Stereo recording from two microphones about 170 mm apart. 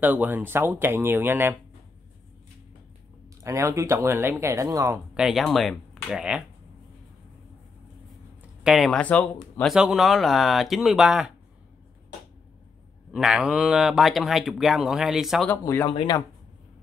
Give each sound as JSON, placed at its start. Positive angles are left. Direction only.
{"t": 0.0, "sound": "speech", "side_deg": -10}
{"t": 3.4, "sound": "speech", "side_deg": -15}
{"t": 5.1, "sound": "speech", "side_deg": -5}
{"t": 8.6, "sound": "speech", "side_deg": 0}
{"t": 13.1, "sound": "speech", "side_deg": -5}
{"t": 15.5, "sound": "speech", "side_deg": 15}